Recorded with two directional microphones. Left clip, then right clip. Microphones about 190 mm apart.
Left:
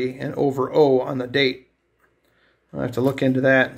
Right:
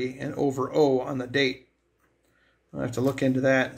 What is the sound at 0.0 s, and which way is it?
Speech, 10° left (ahead or behind).